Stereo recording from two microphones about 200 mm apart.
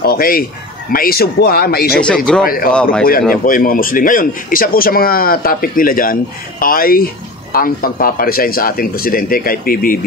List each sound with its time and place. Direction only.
0.0 s speech: 50° left (ahead or behind)
2.0 s speech: 5° left (ahead or behind)
2.4 s speech: 45° left (ahead or behind)
2.7 s speech: 5° left (ahead or behind)
3.1 s speech: 45° left (ahead or behind)